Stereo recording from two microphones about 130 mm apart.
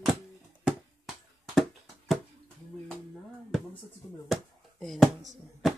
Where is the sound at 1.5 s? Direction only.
Centre (ahead or behind).